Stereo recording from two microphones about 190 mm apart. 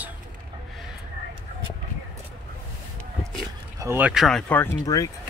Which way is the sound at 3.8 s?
10° right (ahead or behind).